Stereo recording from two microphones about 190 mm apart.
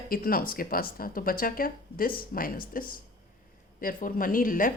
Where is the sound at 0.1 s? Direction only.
50° left (ahead or behind).